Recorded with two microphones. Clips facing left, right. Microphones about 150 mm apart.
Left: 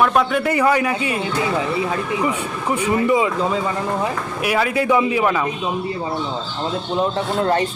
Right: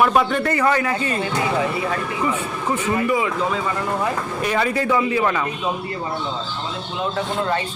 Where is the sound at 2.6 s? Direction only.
15° left (ahead or behind).